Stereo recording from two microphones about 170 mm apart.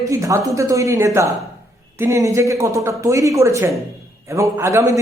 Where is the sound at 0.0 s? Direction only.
20° right (ahead or behind).